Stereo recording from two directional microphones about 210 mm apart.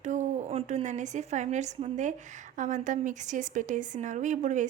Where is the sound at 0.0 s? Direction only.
35° right (ahead or behind).